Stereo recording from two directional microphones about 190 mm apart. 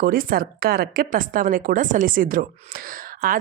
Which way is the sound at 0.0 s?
50° right (ahead or behind).